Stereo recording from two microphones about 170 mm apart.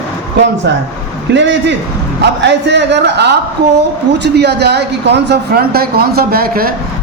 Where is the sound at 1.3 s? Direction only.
90° right.